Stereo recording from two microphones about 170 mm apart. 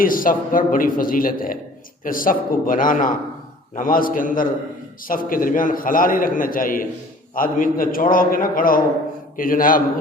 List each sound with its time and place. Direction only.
0.0 s a man's voice: 55° left (ahead or behind)